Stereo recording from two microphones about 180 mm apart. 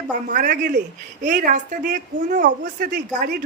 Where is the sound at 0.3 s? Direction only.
50° right (ahead or behind).